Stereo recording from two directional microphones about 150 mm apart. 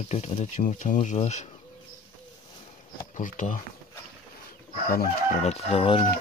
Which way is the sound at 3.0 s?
60° left (ahead or behind).